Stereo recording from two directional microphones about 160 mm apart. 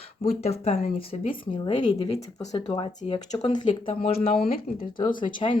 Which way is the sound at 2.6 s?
25° left (ahead or behind).